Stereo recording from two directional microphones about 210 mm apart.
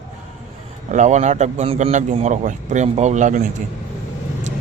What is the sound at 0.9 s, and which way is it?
Speech, 35° right (ahead or behind).